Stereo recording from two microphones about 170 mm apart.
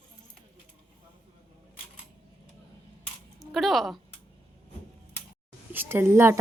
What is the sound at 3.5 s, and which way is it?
Speech, centre (ahead or behind).